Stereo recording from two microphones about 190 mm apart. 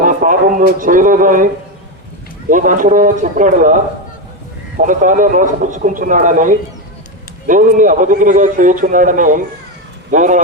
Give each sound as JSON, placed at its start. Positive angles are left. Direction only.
{"t": 0.0, "sound": "a sound", "side_deg": -45}
{"t": 0.8, "sound": "a man's voice", "side_deg": -45}
{"t": 2.5, "sound": "a man's voice", "side_deg": -45}
{"t": 4.8, "sound": "a man's voice", "side_deg": -45}